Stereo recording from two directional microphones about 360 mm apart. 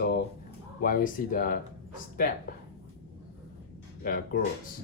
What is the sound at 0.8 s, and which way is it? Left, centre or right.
Speech, left.